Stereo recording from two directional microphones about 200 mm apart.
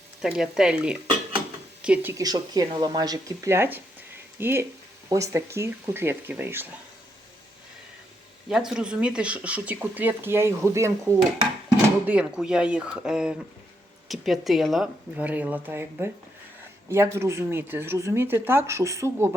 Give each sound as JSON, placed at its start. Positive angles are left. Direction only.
{"t": 0.2, "sound": "speech", "side_deg": 0}
{"t": 8.4, "sound": "speech", "side_deg": -5}